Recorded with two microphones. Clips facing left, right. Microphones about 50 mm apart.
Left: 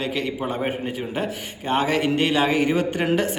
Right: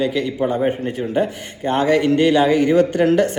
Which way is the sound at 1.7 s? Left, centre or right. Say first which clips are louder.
Right 5 dB; centre.